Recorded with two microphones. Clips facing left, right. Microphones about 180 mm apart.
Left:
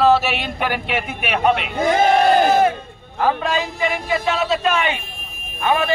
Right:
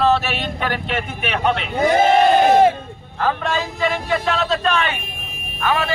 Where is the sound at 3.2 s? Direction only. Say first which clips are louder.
Left 2 dB; 15° left (ahead or behind).